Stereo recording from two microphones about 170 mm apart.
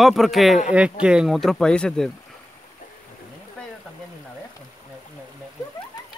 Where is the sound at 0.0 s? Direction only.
Centre (ahead or behind).